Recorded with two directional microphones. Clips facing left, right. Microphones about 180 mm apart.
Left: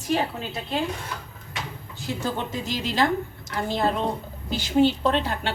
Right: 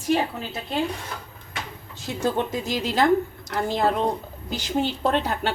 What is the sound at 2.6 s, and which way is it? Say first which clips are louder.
Speech: even; 45° right (ahead or behind).